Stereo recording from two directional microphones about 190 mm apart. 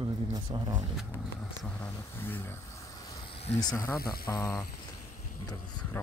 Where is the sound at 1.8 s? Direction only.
10° left (ahead or behind).